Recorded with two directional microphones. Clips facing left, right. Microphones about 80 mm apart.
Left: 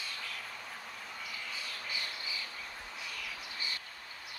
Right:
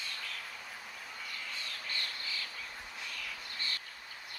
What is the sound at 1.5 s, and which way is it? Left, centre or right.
Bird, centre.